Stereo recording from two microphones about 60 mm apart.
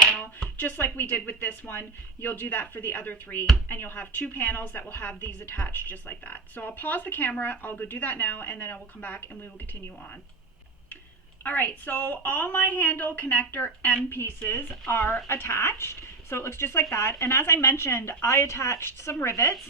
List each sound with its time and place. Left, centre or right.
0.4 s a woman's voice: left
11.4 s a woman's voice: left